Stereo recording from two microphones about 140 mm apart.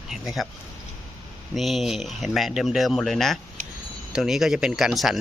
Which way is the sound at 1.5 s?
Centre (ahead or behind).